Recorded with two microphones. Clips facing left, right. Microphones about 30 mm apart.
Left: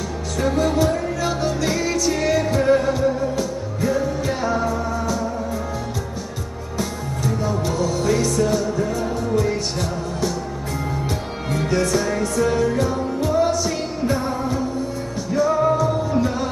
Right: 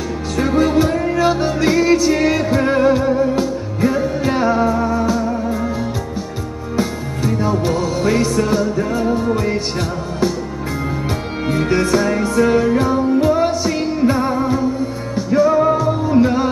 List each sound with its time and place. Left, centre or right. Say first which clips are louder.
0.4 s music: right 4 dB; right
6.8 s music: right 5 dB; right
11.4 s music: right 4 dB; right